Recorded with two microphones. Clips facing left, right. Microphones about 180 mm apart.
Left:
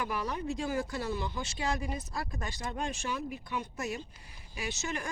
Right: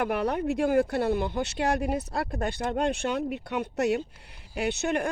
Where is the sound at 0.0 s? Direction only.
60° right (ahead or behind).